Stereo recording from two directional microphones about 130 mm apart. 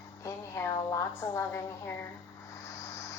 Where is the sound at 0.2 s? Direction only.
20° left (ahead or behind).